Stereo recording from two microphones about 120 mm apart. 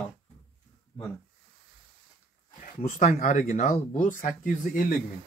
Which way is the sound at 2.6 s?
90° left.